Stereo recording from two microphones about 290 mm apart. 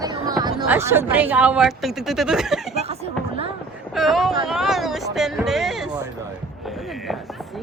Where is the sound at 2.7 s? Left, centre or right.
Right.